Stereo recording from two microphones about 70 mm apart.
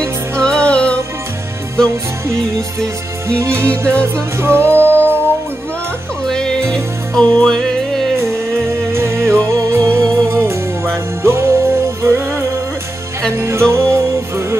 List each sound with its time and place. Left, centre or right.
0.4 s music: centre
3.3 s music: right
6.2 s music: centre
8.6 s music: right